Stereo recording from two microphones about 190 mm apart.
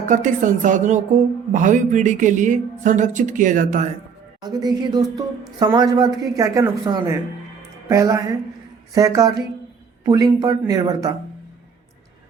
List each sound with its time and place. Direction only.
0.0 s speech: 40° right (ahead or behind)
4.4 s a woman's voice: 20° right (ahead or behind)